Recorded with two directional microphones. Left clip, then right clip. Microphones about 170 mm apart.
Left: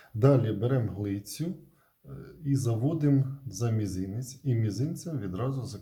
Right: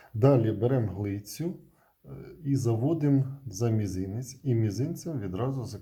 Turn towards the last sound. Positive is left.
turn(degrees=-20)  # may be behind; listen again after turning